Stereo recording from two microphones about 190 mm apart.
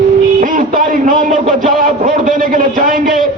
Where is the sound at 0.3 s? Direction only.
45° right (ahead or behind).